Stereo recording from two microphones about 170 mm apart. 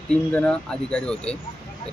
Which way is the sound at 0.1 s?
10° left (ahead or behind).